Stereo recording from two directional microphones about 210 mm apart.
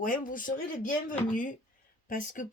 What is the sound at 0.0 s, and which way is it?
Speech, 40° left (ahead or behind).